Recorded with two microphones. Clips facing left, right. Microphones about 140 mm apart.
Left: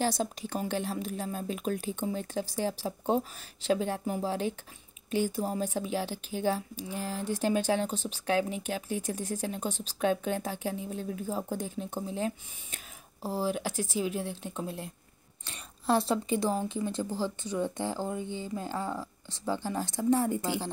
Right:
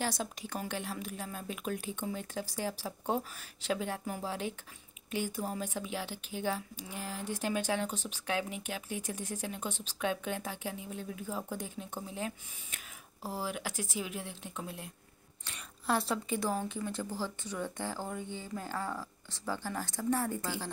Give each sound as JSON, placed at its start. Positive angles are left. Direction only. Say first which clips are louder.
{"t": 0.0, "sound": "speech", "louder": "left 6 dB", "side_deg": 30}